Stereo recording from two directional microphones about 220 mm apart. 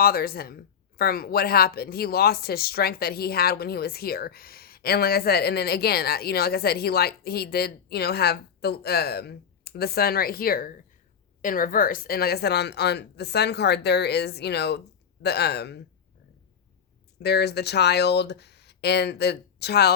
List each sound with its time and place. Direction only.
0.0 s speech: 45° left (ahead or behind)
17.2 s speech: 50° left (ahead or behind)